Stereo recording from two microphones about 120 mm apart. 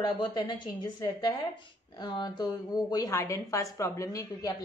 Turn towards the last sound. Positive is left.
turn(degrees=30)  # may be behind; listen again after turning